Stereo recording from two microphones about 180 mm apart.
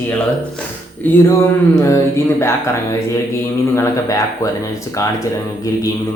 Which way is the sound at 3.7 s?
15° left (ahead or behind).